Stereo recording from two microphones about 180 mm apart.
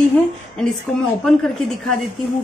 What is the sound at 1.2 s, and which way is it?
Speech, centre (ahead or behind).